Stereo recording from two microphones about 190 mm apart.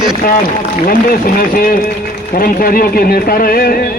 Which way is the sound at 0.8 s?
45° left (ahead or behind).